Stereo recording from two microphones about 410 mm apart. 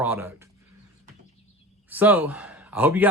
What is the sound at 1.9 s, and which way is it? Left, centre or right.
Speech, centre.